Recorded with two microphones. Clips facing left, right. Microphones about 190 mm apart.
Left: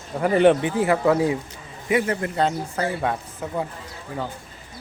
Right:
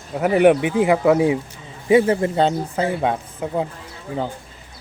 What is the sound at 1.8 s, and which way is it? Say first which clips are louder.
Speech: right 7 dB; 25° right (ahead or behind).